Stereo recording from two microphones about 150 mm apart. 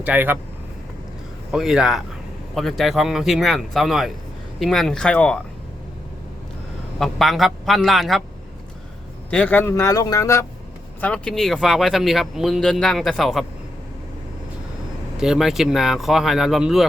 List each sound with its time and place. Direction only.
0.0 s speech: 10° right (ahead or behind)
1.5 s speech: centre (ahead or behind)
7.0 s speech: centre (ahead or behind)
9.3 s speech: 10° left (ahead or behind)
11.0 s speech: 5° left (ahead or behind)
15.2 s speech: 5° right (ahead or behind)